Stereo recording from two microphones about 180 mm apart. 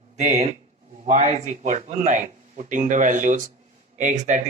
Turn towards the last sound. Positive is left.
turn(degrees=-40)  # may be behind; listen again after turning